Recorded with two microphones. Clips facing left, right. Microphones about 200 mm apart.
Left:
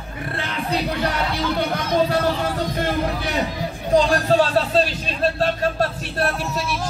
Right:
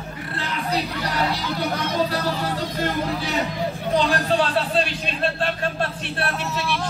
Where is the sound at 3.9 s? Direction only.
40° left (ahead or behind).